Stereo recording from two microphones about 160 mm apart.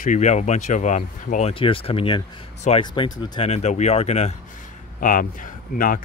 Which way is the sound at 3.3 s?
40° left (ahead or behind).